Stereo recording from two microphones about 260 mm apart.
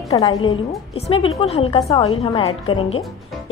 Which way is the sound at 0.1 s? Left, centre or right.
Centre.